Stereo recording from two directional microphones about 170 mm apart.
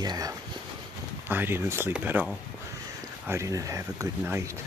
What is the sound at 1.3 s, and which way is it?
Speech, 10° right (ahead or behind).